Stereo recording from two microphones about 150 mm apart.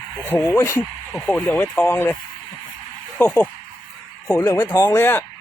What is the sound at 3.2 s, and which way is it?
Speech, 10° left (ahead or behind).